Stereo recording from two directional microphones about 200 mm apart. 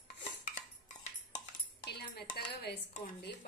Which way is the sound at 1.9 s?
55° left (ahead or behind).